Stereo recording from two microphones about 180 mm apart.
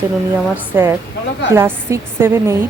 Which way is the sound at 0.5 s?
10° right (ahead or behind).